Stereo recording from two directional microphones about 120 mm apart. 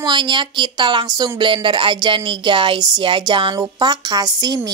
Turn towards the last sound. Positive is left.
turn(degrees=-35)  # may be behind; listen again after turning